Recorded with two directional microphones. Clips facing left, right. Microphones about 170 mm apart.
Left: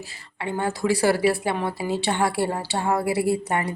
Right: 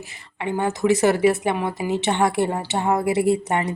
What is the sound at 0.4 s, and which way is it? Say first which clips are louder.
A woman's voice: right 4 dB; 20° right (ahead or behind).